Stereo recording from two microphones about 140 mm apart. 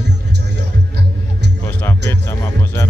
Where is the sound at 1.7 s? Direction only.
15° left (ahead or behind).